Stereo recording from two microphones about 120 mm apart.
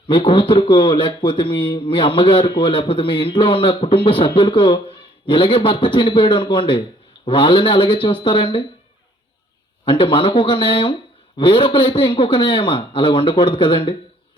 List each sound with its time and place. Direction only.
0.1 s a man's voice: 45° left (ahead or behind)
9.8 s a man's voice: 40° left (ahead or behind)